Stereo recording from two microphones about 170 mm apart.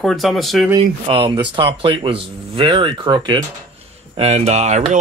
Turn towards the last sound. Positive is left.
turn(degrees=-40)  # may be behind; listen again after turning